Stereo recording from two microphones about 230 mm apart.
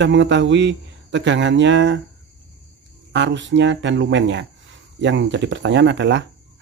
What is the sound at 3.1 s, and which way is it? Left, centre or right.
Speech, right.